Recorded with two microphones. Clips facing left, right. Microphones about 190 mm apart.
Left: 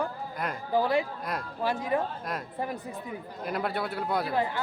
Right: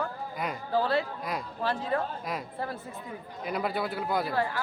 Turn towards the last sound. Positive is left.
turn(degrees=20)  # may be behind; listen again after turning